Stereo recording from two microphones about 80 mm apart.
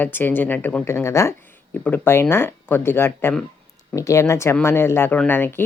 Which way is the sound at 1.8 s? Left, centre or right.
Left.